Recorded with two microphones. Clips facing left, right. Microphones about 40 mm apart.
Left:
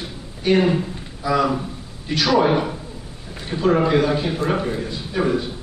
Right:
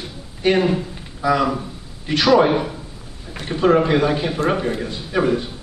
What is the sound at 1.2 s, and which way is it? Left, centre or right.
Speech, right.